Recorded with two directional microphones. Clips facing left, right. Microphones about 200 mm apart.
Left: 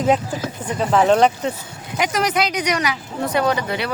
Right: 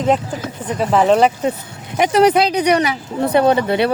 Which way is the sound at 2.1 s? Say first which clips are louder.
Right 9 dB; 30° right (ahead or behind).